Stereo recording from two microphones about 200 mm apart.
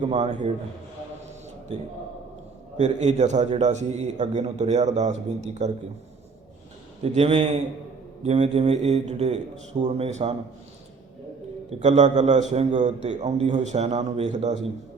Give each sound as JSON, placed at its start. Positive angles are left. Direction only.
{"t": 0.0, "sound": "a man's voice", "side_deg": -30}
{"t": 2.7, "sound": "a man's voice", "side_deg": -35}
{"t": 7.0, "sound": "a man's voice", "side_deg": -30}
{"t": 11.8, "sound": "a man's voice", "side_deg": -35}